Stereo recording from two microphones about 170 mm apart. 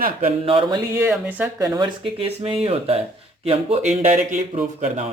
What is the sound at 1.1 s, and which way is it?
Speech, 5° right (ahead or behind).